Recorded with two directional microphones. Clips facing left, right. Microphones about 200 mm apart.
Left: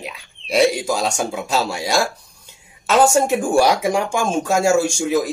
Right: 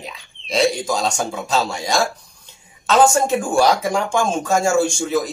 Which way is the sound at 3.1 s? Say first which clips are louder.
Left 2 dB; 10° left (ahead or behind).